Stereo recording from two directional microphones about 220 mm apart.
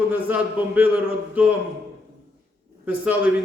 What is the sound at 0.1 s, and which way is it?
A man's voice, 10° right (ahead or behind).